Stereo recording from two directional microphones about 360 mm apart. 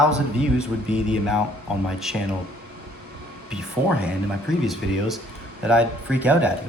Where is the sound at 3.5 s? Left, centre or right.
Centre.